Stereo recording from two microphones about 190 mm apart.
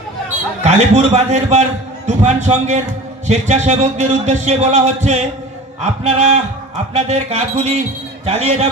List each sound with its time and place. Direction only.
0.7 s speech: 35° right (ahead or behind)